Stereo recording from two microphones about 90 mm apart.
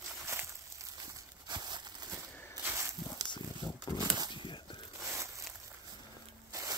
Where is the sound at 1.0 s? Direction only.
50° right (ahead or behind).